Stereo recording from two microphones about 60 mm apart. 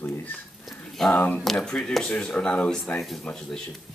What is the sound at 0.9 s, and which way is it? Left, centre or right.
A woman's voice, centre.